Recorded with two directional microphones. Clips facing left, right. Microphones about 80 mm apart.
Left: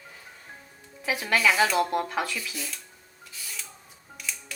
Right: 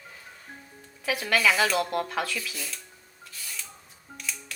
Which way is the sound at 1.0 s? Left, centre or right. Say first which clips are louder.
Even; left.